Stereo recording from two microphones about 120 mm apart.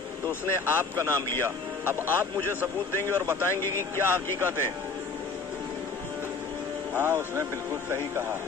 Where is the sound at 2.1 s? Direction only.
15° left (ahead or behind).